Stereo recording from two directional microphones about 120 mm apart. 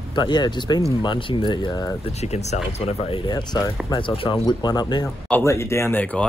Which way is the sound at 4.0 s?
45° left (ahead or behind).